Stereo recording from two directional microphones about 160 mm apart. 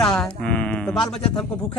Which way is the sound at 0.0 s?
5° left (ahead or behind).